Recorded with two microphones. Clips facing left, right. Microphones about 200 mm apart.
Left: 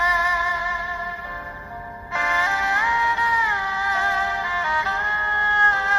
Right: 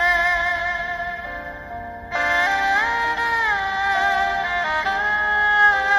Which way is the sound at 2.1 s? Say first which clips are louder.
Right 3 dB; 35° right (ahead or behind).